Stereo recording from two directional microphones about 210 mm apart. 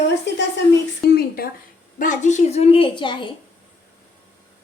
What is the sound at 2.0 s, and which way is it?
A woman's voice, 35° left (ahead or behind).